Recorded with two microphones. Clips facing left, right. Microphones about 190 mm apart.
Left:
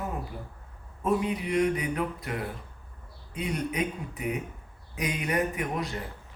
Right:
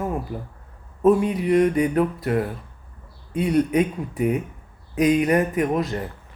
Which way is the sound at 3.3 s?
50° right (ahead or behind).